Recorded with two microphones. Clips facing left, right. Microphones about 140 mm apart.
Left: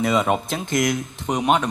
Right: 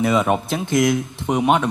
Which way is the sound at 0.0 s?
10° right (ahead or behind).